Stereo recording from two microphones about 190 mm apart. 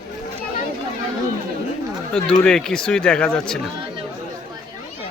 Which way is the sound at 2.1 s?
5° left (ahead or behind).